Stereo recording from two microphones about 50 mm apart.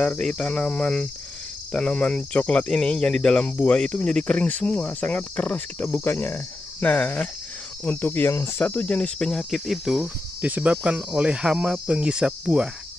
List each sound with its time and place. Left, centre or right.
0.2 s speech: centre
6.0 s speech: left
8.3 s speech: left
8.5 s speech: left
8.8 s speech: left
9.5 s speech: centre
10.0 s speech: right
12.3 s cricket: centre